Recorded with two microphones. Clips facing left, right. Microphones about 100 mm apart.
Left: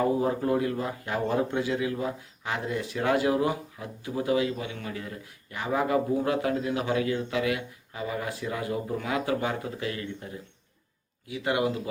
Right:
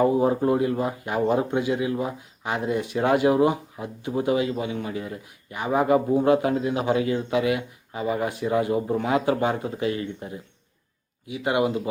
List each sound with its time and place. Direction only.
0.0 s speech: 20° right (ahead or behind)